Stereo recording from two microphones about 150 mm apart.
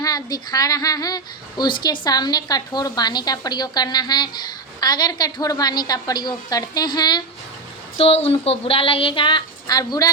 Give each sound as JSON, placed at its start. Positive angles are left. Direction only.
{"t": 0.0, "sound": "a woman's voice", "side_deg": 25}
{"t": 7.9, "sound": "speech", "side_deg": 40}